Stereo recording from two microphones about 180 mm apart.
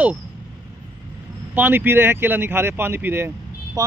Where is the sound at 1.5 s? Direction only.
10° right (ahead or behind).